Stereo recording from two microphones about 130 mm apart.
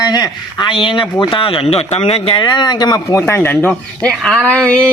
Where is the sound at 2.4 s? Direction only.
35° left (ahead or behind); by 4.8 s 10° left (ahead or behind).